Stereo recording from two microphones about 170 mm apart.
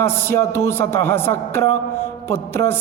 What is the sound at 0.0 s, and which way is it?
A man's voice, 15° left (ahead or behind).